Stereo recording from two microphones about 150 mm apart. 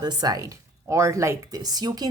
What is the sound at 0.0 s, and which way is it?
Speech, 25° right (ahead or behind).